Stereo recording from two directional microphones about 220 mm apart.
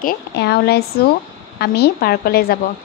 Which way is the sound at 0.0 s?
50° left (ahead or behind).